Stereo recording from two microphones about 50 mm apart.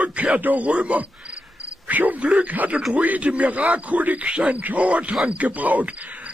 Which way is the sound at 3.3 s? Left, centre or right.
Right.